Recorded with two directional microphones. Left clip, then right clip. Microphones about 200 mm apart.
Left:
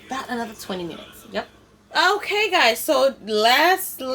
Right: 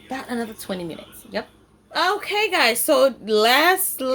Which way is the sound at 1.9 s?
10° right (ahead or behind).